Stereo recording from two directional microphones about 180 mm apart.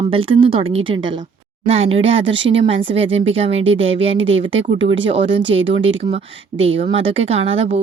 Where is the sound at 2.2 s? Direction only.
90° right.